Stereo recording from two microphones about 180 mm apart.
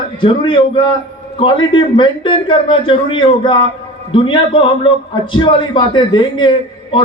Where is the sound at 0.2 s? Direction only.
30° left (ahead or behind).